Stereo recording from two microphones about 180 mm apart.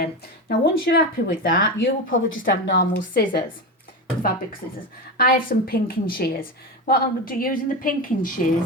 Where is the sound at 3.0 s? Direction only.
50° left (ahead or behind).